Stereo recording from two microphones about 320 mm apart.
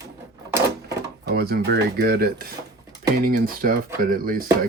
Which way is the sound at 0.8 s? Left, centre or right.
Right.